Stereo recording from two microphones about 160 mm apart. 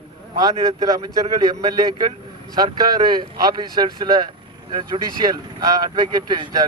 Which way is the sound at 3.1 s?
25° right (ahead or behind).